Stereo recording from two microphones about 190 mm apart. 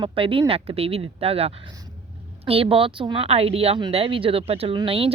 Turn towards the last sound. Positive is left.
turn(degrees=-30)  # may be behind; listen again after turning